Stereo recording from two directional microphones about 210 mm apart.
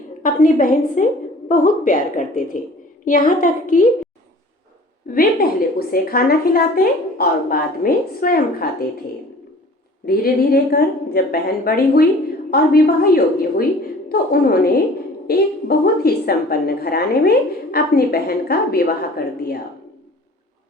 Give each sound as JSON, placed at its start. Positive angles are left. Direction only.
{"t": 0.2, "sound": "a woman's voice", "side_deg": 40}
{"t": 5.1, "sound": "a woman's voice", "side_deg": 45}
{"t": 10.1, "sound": "a woman's voice", "side_deg": 45}